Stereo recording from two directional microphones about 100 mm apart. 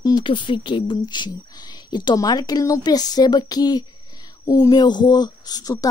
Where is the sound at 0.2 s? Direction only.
55° left (ahead or behind).